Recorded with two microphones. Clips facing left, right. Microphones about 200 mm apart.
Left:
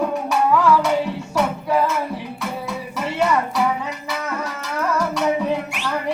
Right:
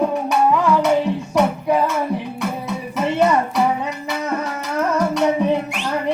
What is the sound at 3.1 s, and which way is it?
Music, 20° right (ahead or behind).